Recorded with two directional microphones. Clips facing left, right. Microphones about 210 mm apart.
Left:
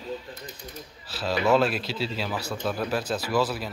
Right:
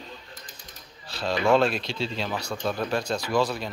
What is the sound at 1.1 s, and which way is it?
Speech, 5° left (ahead or behind).